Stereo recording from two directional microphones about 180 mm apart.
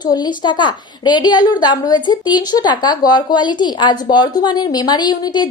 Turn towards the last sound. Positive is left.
turn(degrees=25)  # may be behind; listen again after turning